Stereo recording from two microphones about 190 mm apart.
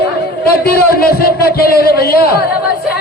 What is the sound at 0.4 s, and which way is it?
A man's voice, 50° left (ahead or behind).